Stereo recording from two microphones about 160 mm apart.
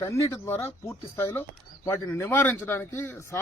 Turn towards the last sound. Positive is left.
turn(degrees=15)  # may be behind; listen again after turning